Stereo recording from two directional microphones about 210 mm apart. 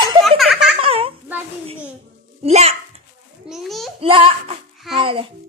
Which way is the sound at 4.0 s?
25° right (ahead or behind).